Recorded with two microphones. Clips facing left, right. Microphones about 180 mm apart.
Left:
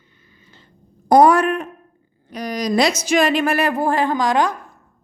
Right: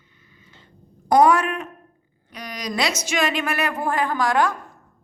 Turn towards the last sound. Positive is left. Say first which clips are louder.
# left 2 dB
turn(degrees=20)  # may be behind; listen again after turning